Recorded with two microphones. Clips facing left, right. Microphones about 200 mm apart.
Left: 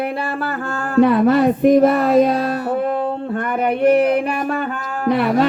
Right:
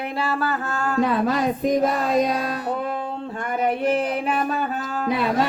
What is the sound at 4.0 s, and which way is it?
Music, 60° left (ahead or behind).